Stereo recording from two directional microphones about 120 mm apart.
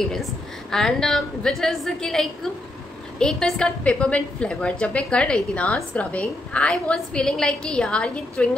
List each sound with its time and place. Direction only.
0.1 s a woman's voice: 5° left (ahead or behind)